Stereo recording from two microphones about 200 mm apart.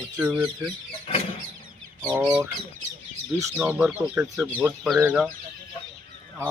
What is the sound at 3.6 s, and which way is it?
Speech, 5° right (ahead or behind).